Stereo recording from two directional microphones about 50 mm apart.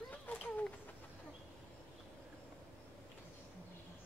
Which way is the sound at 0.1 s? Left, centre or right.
Left.